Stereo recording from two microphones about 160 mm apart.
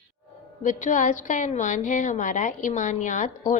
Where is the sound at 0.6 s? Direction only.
50° left (ahead or behind).